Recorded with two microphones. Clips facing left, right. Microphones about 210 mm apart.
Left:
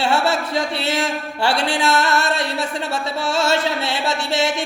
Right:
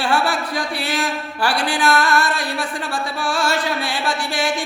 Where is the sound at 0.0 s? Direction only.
25° left (ahead or behind).